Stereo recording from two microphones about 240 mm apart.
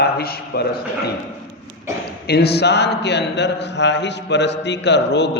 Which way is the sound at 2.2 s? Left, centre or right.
Left.